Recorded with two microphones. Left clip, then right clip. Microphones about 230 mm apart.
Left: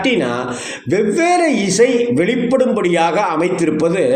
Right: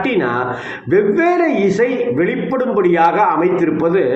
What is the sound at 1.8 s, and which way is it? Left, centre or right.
A man's voice, centre.